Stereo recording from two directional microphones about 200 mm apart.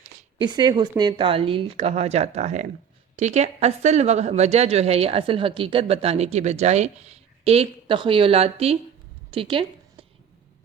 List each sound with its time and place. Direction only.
0.3 s speech: 20° right (ahead or behind)